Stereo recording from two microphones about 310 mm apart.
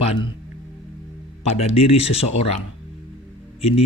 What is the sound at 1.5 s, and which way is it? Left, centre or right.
Speech, centre.